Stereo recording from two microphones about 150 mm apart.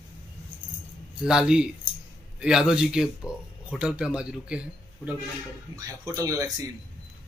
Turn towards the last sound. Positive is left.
turn(degrees=-20)  # may be behind; listen again after turning